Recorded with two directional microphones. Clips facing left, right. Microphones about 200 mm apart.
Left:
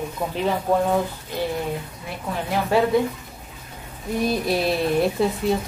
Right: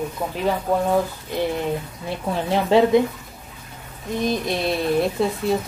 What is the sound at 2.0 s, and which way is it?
Speech, 25° right (ahead or behind).